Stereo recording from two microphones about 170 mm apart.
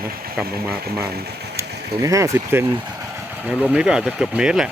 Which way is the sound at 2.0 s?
20° right (ahead or behind).